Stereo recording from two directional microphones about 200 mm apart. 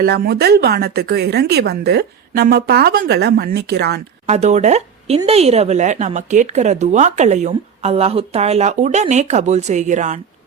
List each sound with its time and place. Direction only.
0.0 s a woman's voice: 50° right (ahead or behind)
4.3 s speech: 35° right (ahead or behind)